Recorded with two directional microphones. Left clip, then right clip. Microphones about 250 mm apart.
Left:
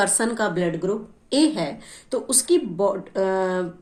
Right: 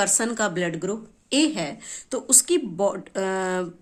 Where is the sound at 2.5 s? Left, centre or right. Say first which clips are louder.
Left 2 dB; right.